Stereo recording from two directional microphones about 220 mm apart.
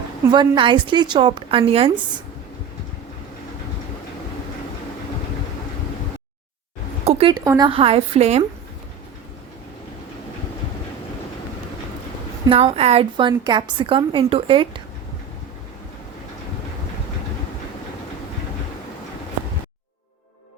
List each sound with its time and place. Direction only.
0.3 s a woman's voice: 20° right (ahead or behind)
7.0 s a woman's voice: 25° right (ahead or behind)
12.5 s a woman's voice: 25° right (ahead or behind)